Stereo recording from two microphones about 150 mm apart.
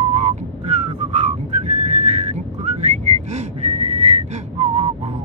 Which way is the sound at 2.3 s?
50° right (ahead or behind).